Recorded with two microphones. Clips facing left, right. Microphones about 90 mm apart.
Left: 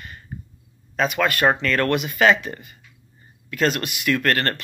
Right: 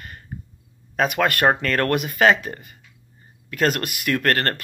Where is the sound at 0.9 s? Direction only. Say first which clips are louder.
Right 1 dB; 55° right (ahead or behind).